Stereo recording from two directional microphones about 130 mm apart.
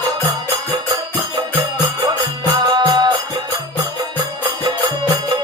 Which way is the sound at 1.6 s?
30° right (ahead or behind).